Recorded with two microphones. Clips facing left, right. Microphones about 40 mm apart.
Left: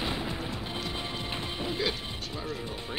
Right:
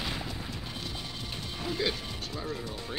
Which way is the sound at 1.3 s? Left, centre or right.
Left.